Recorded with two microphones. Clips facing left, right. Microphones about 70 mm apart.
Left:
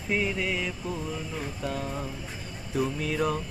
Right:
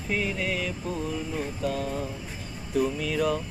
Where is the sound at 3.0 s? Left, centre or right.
Left.